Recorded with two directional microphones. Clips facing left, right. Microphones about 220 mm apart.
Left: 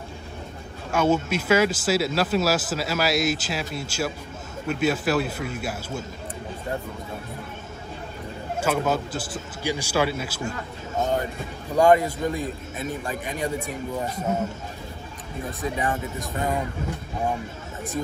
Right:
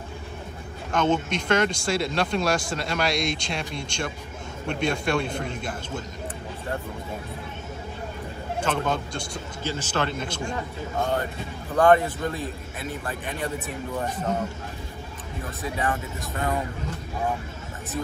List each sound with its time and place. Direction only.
0.9 s speech: 10° left (ahead or behind)
8.5 s a man's voice: 10° left (ahead or behind)
11.0 s a man's voice: 20° left (ahead or behind)
15.8 s a man's voice: 15° left (ahead or behind)